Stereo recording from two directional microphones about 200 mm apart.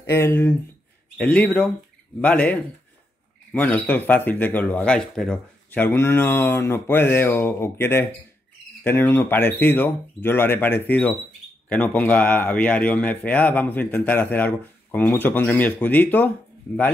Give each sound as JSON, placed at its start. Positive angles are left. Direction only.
{"t": 0.1, "sound": "speech", "side_deg": 10}